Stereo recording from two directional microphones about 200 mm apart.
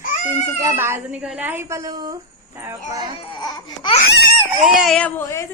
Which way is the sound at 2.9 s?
20° right (ahead or behind).